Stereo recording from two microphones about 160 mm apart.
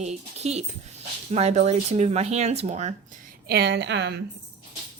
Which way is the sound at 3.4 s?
90° right.